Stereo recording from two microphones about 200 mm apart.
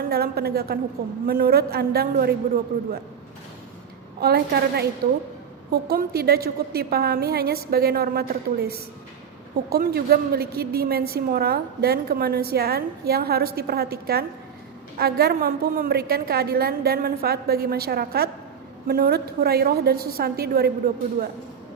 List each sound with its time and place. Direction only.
0.0 s a woman's voice: 50° right (ahead or behind)
4.2 s a woman's voice: 55° right (ahead or behind)